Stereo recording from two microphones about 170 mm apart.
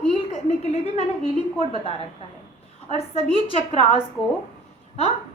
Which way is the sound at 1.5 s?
35° left (ahead or behind).